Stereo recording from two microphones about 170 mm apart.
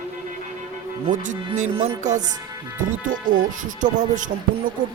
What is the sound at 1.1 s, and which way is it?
Speech, 50° right (ahead or behind).